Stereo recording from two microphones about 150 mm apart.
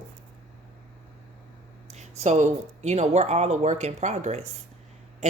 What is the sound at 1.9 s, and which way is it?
Speech, 50° right (ahead or behind).